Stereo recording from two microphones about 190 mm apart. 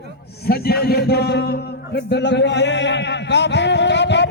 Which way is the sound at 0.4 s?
55° left (ahead or behind).